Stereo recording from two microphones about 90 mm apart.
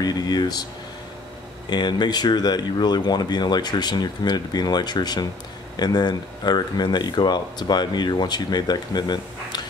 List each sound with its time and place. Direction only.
0.0 s speech: 50° left (ahead or behind)
1.7 s speech: 55° left (ahead or behind)